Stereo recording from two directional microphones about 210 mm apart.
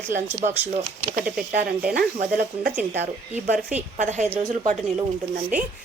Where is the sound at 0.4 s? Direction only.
40° right (ahead or behind).